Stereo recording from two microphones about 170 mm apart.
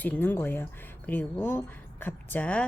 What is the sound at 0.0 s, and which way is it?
Speech, 10° left (ahead or behind).